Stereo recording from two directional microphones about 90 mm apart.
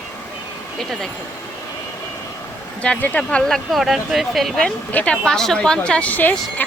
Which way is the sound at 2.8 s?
15° left (ahead or behind).